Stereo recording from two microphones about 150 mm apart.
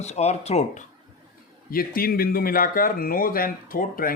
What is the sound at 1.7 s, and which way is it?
Speech, 75° left (ahead or behind).